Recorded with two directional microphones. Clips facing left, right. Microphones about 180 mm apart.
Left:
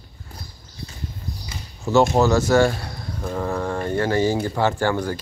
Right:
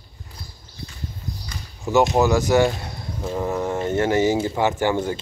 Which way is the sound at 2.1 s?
15° right (ahead or behind).